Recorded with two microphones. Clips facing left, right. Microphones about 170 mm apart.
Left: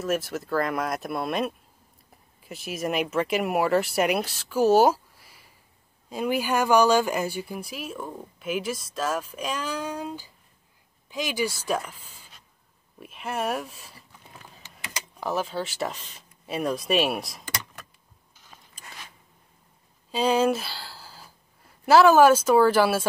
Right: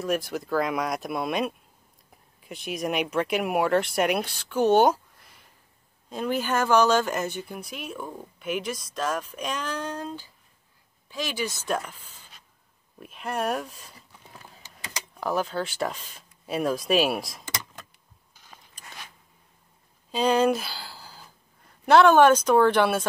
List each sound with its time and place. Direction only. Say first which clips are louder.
0.0 s speech: even; centre (ahead or behind)
15.1 s speech: right 1 dB; 5° left (ahead or behind)
20.1 s speech: even; 5° left (ahead or behind)